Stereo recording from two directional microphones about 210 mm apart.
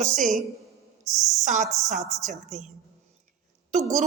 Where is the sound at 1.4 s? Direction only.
35° right (ahead or behind).